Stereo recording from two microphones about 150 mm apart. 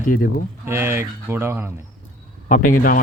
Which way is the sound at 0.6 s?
15° right (ahead or behind).